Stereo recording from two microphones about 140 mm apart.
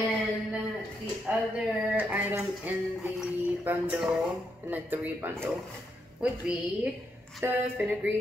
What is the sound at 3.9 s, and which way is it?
Speech, centre (ahead or behind).